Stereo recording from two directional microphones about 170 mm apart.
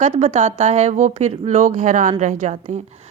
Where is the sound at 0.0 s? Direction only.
40° right (ahead or behind).